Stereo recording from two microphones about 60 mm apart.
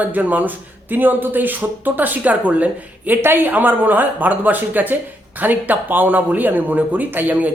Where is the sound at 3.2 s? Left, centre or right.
Right.